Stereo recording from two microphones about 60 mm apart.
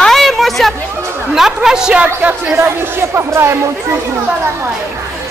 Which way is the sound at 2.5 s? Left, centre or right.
Right.